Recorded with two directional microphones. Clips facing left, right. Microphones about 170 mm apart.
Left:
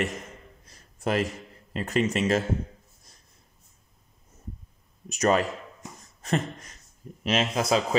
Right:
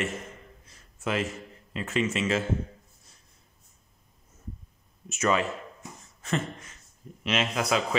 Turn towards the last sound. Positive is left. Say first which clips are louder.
# left 3 dB
turn(degrees=35)  # may be behind; listen again after turning